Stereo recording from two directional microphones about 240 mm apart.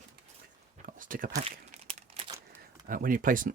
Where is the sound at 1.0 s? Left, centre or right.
Right.